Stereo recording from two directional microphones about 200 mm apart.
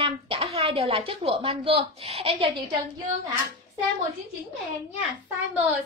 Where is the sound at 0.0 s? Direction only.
30° right (ahead or behind).